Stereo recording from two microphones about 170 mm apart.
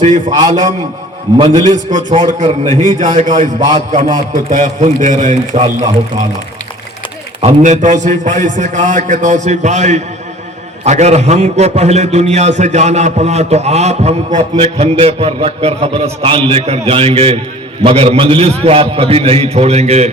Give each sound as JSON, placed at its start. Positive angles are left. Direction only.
{"t": 0.3, "sound": "a man's voice", "side_deg": -25}
{"t": 1.6, "sound": "a man's voice", "side_deg": -50}
{"t": 7.4, "sound": "a man's voice", "side_deg": -45}